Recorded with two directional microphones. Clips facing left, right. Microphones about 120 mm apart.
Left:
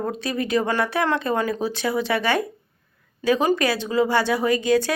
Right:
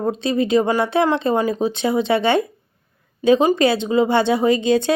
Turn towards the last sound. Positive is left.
turn(degrees=-25)  # may be behind; listen again after turning